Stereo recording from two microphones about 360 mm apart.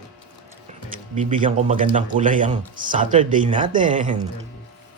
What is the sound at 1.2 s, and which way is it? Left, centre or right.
Speech, centre.